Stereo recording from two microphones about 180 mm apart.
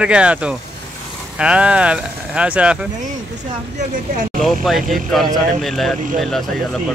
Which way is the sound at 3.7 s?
45° right (ahead or behind).